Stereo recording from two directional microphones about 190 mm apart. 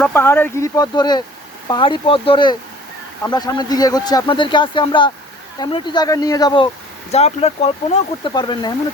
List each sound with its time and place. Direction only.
0.0 s a man's voice: 10° left (ahead or behind)
7.1 s speech: 35° left (ahead or behind)
8.3 s a man's voice: 20° left (ahead or behind)